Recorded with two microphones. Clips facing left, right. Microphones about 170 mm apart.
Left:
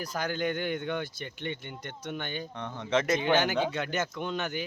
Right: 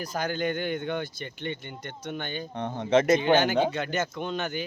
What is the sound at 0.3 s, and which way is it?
Speech, 5° left (ahead or behind).